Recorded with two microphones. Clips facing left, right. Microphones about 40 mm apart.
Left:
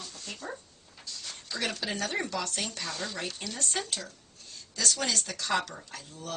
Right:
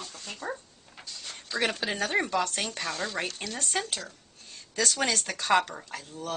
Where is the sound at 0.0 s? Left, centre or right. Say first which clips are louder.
Right 2 dB; right.